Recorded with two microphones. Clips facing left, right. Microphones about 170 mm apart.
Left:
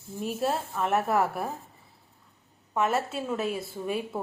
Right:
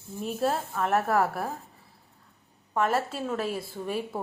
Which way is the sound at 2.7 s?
Centre (ahead or behind).